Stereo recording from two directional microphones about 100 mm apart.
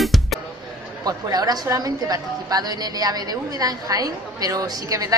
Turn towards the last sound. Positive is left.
turn(degrees=-35)  # may be behind; listen again after turning